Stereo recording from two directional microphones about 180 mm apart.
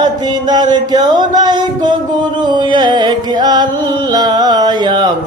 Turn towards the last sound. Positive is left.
turn(degrees=-25)  # may be behind; listen again after turning